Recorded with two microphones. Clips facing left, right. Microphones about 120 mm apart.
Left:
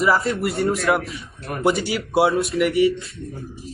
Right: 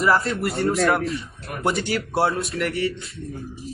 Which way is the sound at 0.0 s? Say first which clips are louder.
Left 1 dB; centre (ahead or behind).